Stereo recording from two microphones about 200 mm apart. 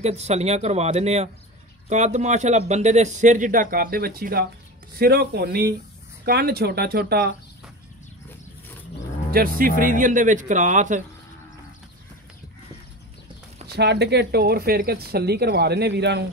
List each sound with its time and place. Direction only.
0.0 s speech: 35° right (ahead or behind); by 7.3 s 55° right (ahead or behind)
9.3 s speech: 45° right (ahead or behind)
13.7 s speech: 55° right (ahead or behind)